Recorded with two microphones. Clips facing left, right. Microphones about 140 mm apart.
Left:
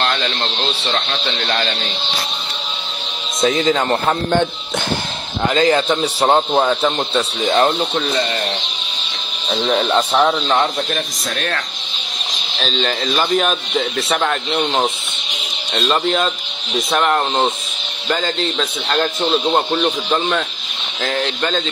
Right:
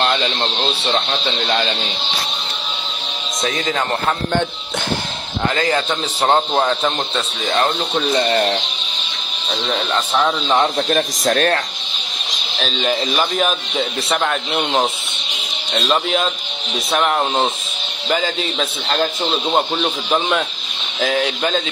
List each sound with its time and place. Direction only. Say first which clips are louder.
0.0 s a sound: right 2 dB; 15° right (ahead or behind)
0.6 s speech: right 2 dB; 25° right (ahead or behind)
5.5 s speech: left 5 dB; 20° left (ahead or behind)
5.9 s speech: left 2 dB; 5° left (ahead or behind)
9.5 s speech: left 4 dB; centre (ahead or behind)
10.8 s speech: right 5 dB; 40° right (ahead or behind)
12.5 s speech: right 1 dB; 5° right (ahead or behind)